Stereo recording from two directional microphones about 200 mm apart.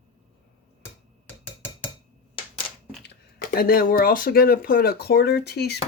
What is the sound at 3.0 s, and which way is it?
Speech, 45° left (ahead or behind).